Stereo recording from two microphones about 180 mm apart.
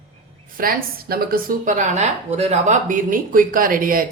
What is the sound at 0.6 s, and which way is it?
Speech, 55° right (ahead or behind).